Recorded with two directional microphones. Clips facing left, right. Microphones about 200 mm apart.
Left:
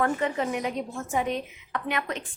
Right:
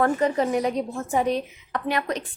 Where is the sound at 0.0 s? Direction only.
35° right (ahead or behind).